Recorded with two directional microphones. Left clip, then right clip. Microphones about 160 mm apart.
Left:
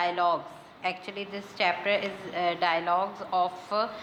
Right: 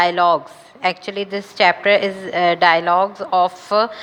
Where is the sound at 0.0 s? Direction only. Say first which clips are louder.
Right 11 dB; 35° right (ahead or behind).